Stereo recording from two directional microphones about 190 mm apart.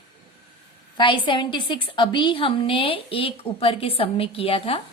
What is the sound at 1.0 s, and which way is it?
A woman's voice, 25° left (ahead or behind).